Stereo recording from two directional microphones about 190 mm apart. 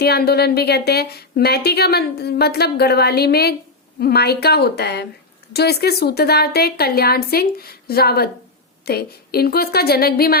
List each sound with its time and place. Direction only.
0.0 s a woman's voice: 55° left (ahead or behind)